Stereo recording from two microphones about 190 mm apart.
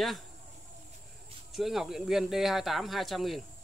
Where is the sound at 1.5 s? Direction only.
Centre (ahead or behind).